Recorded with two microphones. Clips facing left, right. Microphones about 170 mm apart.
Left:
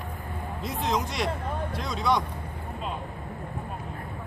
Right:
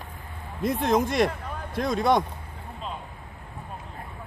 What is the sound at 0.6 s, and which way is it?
Speech, 50° right (ahead or behind).